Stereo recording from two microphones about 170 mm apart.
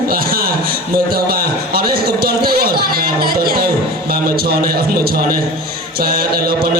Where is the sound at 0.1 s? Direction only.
60° right (ahead or behind).